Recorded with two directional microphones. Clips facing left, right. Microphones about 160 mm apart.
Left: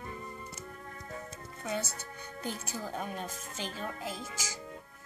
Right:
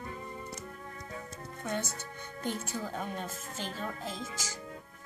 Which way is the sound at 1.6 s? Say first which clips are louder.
Even; 10° left (ahead or behind).